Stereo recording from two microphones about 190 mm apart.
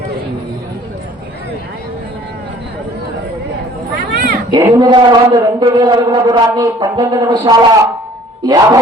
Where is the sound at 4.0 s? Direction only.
50° right (ahead or behind).